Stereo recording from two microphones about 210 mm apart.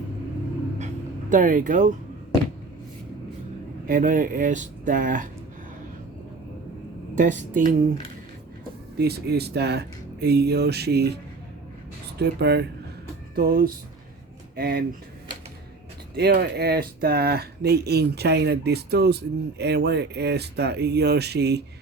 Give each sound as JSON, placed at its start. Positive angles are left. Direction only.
{"t": 1.3, "sound": "speech", "side_deg": -40}
{"t": 3.8, "sound": "speech", "side_deg": -40}
{"t": 7.2, "sound": "speech", "side_deg": -40}
{"t": 9.0, "sound": "speech", "side_deg": -50}
{"t": 12.2, "sound": "speech", "side_deg": -50}
{"t": 16.1, "sound": "speech", "side_deg": -50}